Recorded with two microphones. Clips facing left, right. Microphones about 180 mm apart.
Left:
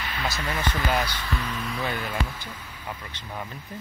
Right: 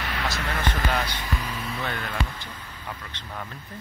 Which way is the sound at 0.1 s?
75° right (ahead or behind).